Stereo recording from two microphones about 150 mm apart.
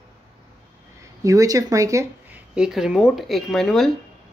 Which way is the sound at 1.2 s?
20° right (ahead or behind).